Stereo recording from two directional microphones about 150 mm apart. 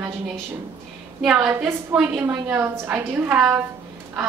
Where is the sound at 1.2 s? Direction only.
5° right (ahead or behind).